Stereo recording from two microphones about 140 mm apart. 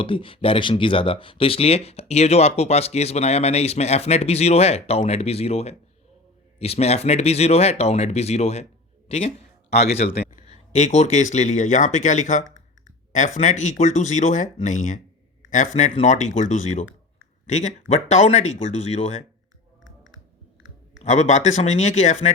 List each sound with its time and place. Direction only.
0.0 s speech: 40° left (ahead or behind)
21.0 s speech: 55° left (ahead or behind)